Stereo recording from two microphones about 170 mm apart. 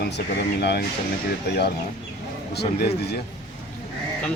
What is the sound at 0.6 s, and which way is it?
Speech, 75° left (ahead or behind).